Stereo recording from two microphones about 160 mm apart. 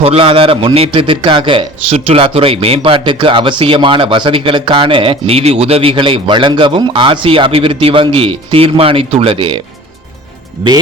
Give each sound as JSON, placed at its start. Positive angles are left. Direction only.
{"t": 0.0, "sound": "a man's voice", "side_deg": -35}